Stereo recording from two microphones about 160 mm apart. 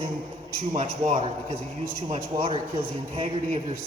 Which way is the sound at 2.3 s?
30° right (ahead or behind).